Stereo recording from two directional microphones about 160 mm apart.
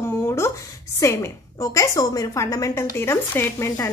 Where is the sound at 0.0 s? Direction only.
15° left (ahead or behind).